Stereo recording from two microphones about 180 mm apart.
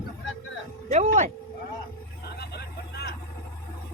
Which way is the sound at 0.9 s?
40° right (ahead or behind).